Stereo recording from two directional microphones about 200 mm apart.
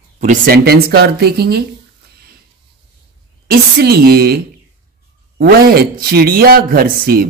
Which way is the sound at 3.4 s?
50° right (ahead or behind).